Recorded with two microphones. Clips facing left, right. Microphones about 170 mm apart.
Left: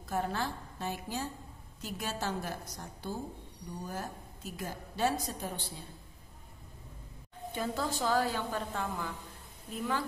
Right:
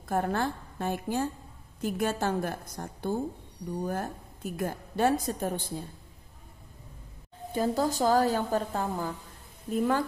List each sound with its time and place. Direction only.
0.1 s a woman's voice: 55° right (ahead or behind)
7.5 s a woman's voice: 40° right (ahead or behind)